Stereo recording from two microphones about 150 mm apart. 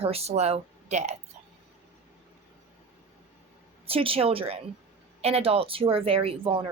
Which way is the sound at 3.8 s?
40° right (ahead or behind).